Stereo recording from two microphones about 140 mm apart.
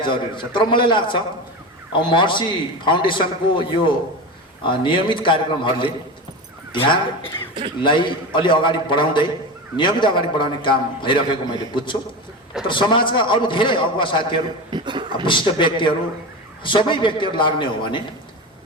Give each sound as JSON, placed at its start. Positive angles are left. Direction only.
{"t": 0.0, "sound": "a man's voice", "side_deg": 35}
{"t": 12.6, "sound": "a man's voice", "side_deg": 35}
{"t": 14.7, "sound": "speech", "side_deg": -35}
{"t": 15.2, "sound": "a man's voice", "side_deg": 35}